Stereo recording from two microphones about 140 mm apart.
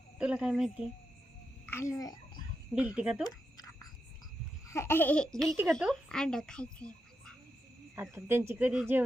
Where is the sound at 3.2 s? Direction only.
25° left (ahead or behind).